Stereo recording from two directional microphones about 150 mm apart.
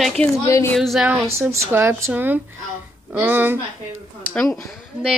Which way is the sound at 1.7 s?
15° right (ahead or behind).